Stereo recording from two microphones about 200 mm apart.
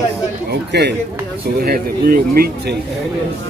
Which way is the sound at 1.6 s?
45° right (ahead or behind).